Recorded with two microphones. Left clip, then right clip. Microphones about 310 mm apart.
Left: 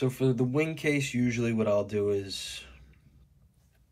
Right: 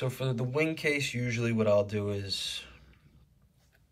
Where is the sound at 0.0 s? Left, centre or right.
Centre.